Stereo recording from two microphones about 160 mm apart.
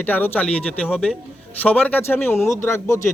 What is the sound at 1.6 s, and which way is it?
A man's voice, 10° left (ahead or behind).